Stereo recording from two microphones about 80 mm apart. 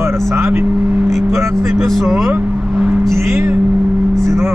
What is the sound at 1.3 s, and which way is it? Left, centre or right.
Speech, right.